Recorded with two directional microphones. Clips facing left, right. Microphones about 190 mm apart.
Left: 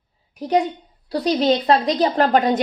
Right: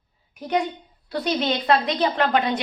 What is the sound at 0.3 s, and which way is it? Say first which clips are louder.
A woman's voice: left 5 dB; 35° left (ahead or behind).